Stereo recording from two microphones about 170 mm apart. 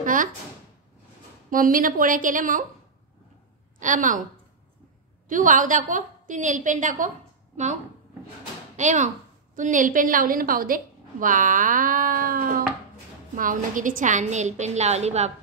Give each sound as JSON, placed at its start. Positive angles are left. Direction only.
{"t": 0.0, "sound": "speech", "side_deg": -50}
{"t": 1.5, "sound": "a woman's voice", "side_deg": -55}
{"t": 3.8, "sound": "a woman's voice", "side_deg": -50}
{"t": 5.3, "sound": "a woman's voice", "side_deg": -50}
{"t": 8.7, "sound": "a woman's voice", "side_deg": -45}